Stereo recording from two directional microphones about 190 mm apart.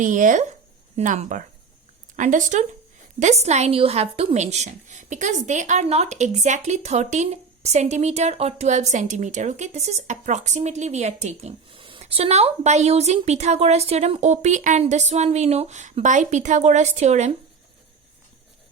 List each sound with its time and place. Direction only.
0.0 s speech: 45° right (ahead or behind)